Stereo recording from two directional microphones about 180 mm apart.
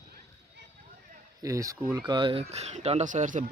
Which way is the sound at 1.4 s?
20° right (ahead or behind).